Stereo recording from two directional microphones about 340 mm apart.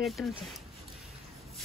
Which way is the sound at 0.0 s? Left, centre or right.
Centre.